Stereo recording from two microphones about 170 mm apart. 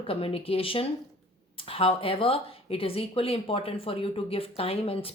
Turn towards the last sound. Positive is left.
turn(degrees=35)  # may be behind; listen again after turning